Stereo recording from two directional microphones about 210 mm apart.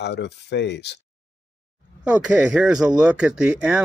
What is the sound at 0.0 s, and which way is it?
Speech, 55° left (ahead or behind).